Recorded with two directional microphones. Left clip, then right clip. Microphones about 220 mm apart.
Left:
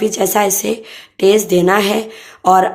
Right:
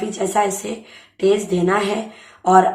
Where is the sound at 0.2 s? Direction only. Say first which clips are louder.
Left 2 dB; 45° left (ahead or behind).